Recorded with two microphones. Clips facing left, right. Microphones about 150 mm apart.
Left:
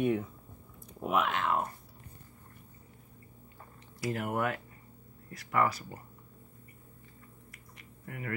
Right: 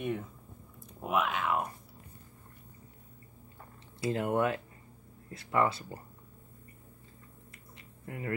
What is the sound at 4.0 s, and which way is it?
Speech, 25° right (ahead or behind).